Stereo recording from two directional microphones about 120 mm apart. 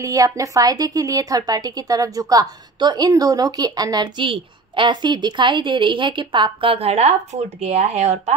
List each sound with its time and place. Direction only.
0.0 s a woman's voice: 30° right (ahead or behind); by 8.4 s 65° right (ahead or behind)